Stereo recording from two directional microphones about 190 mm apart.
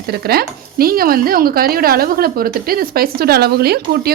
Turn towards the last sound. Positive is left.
turn(degrees=-55)  # may be behind; listen again after turning